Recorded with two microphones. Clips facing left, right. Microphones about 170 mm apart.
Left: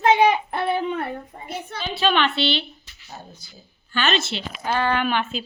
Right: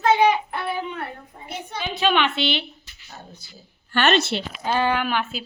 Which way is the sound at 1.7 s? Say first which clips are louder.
Even; 15° right (ahead or behind).